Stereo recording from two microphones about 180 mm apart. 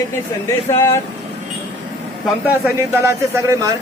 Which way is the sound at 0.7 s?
15° left (ahead or behind).